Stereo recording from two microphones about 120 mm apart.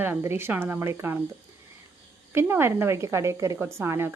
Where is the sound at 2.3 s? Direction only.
20° right (ahead or behind).